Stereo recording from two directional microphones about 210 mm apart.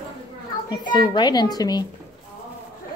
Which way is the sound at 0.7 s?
20° left (ahead or behind).